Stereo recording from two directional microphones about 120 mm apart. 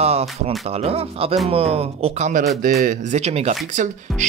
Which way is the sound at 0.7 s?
55° right (ahead or behind).